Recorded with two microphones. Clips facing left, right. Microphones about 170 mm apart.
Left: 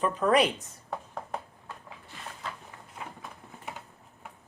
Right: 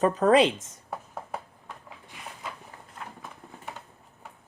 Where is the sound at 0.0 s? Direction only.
40° right (ahead or behind).